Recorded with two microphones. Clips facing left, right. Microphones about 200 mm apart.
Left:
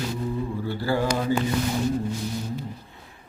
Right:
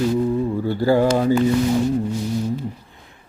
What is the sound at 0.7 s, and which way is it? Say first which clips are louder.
Speech: right 8 dB; 45° right (ahead or behind).